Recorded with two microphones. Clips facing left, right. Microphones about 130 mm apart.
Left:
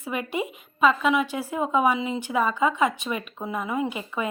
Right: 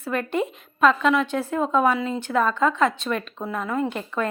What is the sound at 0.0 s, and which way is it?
A woman's voice, 10° left (ahead or behind).